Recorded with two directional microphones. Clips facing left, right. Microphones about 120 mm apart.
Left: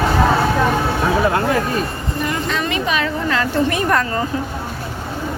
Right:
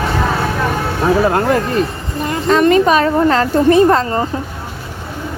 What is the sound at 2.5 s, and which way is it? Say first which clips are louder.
A woman's voice: right 10 dB; 45° right (ahead or behind).